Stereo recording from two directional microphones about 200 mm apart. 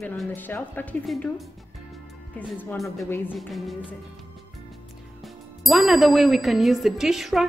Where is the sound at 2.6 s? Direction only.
5° left (ahead or behind).